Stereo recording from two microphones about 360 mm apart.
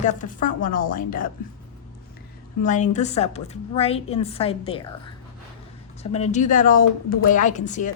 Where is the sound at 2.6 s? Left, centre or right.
Centre.